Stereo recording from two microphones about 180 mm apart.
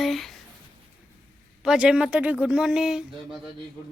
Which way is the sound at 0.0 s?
Centre (ahead or behind).